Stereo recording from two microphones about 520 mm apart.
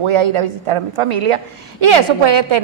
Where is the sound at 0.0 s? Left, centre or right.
Right.